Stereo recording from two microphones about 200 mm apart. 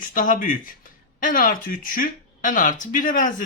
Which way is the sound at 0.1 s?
40° left (ahead or behind).